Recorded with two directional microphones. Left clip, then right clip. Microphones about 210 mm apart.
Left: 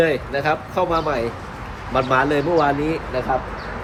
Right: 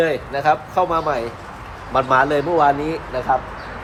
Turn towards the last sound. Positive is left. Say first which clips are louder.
# left 1 dB
turn(degrees=-15)  # may be behind; listen again after turning